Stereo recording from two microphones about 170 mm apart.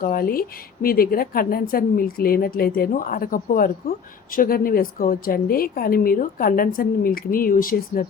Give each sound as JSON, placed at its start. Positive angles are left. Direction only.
{"t": 0.0, "sound": "speech", "side_deg": 60}